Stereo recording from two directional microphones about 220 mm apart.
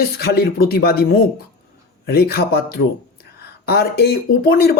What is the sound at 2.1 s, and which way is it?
Speech, 45° left (ahead or behind).